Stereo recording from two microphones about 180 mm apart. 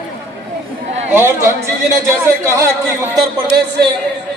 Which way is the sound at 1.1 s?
15° right (ahead or behind).